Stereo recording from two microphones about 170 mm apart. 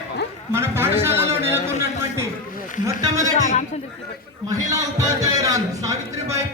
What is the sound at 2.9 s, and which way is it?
Speech, 20° right (ahead or behind).